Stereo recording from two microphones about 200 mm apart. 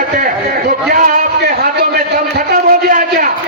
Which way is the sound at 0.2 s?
45° right (ahead or behind).